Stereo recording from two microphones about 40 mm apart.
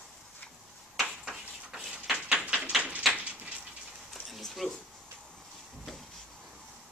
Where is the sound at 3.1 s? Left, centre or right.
Right.